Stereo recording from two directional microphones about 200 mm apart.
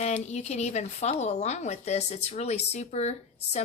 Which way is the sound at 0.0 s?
35° left (ahead or behind).